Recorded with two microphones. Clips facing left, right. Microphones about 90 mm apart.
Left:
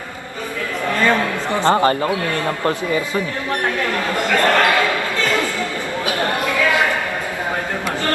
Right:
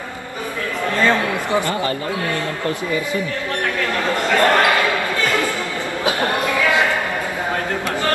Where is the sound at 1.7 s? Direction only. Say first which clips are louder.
Left 6 dB; 40° left (ahead or behind).